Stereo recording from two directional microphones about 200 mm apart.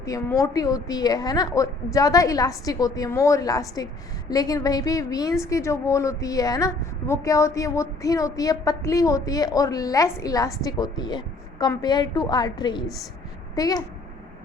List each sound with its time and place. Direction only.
0.0 s a woman's voice: 15° left (ahead or behind)